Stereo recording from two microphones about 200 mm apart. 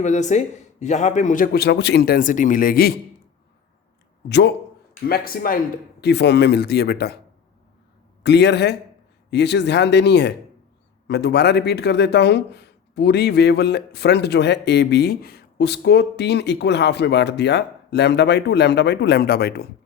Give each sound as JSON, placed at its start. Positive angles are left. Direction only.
{"t": 0.0, "sound": "a man's voice", "side_deg": 35}
{"t": 4.3, "sound": "speech", "side_deg": 60}
{"t": 5.0, "sound": "a man's voice", "side_deg": 50}
{"t": 6.0, "sound": "speech", "side_deg": 55}
{"t": 8.2, "sound": "speech", "side_deg": 55}